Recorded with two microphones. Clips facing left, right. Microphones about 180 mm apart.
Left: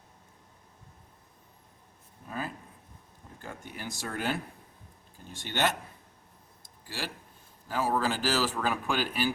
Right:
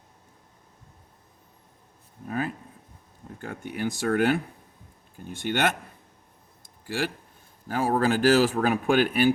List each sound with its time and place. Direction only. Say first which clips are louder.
2.2 s speech: right 7 dB; 60° right (ahead or behind)
6.6 s a sound: right 9 dB; 55° right (ahead or behind)
7.7 s speech: right 5 dB; 55° right (ahead or behind)